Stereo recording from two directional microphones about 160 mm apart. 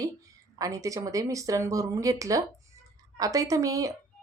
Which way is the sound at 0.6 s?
20° right (ahead or behind).